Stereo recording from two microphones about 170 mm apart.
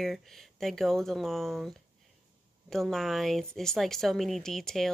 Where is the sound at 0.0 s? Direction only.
Centre (ahead or behind).